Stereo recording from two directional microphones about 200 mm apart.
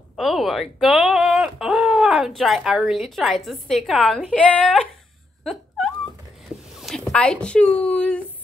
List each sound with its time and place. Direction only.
0.1 s speech: centre (ahead or behind)
5.4 s a sound: centre (ahead or behind)
6.8 s speech: centre (ahead or behind)